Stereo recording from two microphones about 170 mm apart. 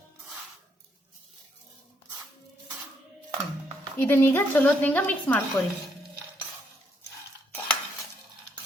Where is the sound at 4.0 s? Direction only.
10° left (ahead or behind).